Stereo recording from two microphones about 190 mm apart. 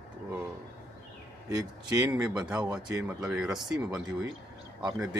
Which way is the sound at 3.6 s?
20° right (ahead or behind).